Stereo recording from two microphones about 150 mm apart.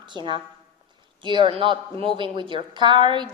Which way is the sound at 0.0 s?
30° right (ahead or behind).